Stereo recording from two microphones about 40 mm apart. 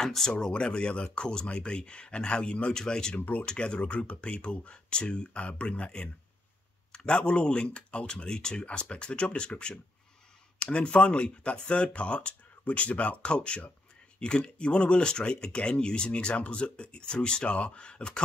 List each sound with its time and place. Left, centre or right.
0.0 s speech: centre
0.3 s speech: left
7.1 s speech: left